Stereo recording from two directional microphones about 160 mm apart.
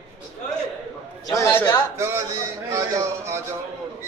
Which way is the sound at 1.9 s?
15° right (ahead or behind).